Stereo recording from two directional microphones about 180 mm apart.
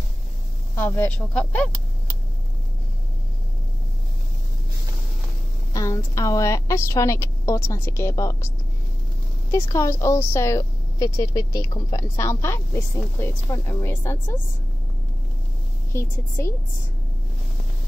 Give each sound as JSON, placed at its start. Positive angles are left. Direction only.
{"t": 0.7, "sound": "speech", "side_deg": 10}
{"t": 5.7, "sound": "speech", "side_deg": 20}
{"t": 9.5, "sound": "speech", "side_deg": 15}
{"t": 15.9, "sound": "speech", "side_deg": 15}